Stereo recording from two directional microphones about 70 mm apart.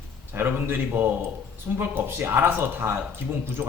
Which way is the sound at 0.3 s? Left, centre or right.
Right.